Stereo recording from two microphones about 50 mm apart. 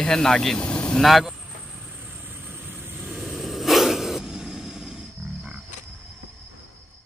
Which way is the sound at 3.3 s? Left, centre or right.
Centre.